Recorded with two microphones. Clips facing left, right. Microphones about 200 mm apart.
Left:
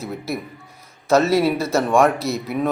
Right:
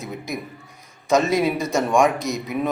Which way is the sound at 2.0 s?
15° right (ahead or behind).